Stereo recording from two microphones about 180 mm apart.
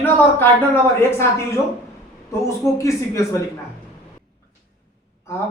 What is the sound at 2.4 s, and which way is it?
Speech, 15° left (ahead or behind).